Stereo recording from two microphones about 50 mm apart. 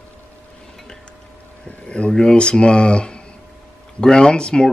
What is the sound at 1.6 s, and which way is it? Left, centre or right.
Speech, left.